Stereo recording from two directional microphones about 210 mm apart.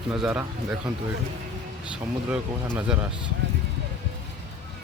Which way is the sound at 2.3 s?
5° right (ahead or behind).